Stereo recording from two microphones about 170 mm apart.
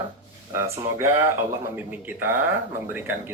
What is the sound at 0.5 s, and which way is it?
Speech, 15° right (ahead or behind).